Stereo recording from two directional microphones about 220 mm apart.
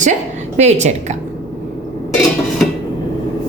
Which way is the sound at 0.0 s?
35° right (ahead or behind).